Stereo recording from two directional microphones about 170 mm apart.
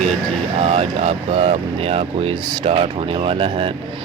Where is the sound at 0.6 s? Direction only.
40° right (ahead or behind).